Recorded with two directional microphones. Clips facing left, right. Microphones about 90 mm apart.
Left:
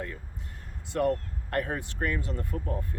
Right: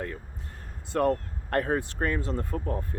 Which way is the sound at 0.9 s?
40° right (ahead or behind).